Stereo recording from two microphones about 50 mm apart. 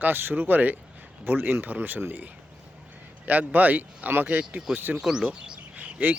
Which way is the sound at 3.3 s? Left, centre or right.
Right.